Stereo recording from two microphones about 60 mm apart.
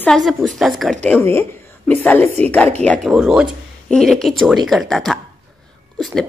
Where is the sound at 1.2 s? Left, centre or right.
Left.